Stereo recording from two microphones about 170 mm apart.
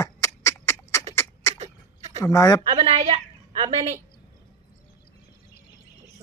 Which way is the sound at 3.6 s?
40° right (ahead or behind).